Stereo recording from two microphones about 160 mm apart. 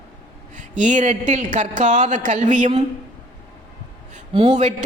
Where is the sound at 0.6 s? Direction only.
50° right (ahead or behind).